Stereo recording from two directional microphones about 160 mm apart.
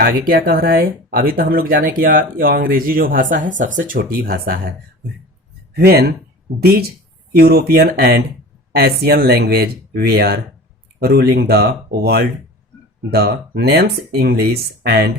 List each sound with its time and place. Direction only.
0.0 s speech: 75° right (ahead or behind)
5.7 s speech: 75° right (ahead or behind)